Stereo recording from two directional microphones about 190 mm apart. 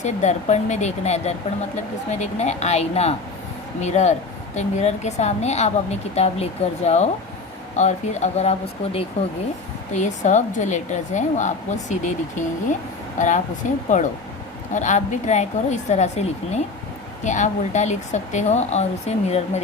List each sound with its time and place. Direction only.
0.0 s a woman's voice: 40° left (ahead or behind)
13.1 s a woman's voice: 40° left (ahead or behind)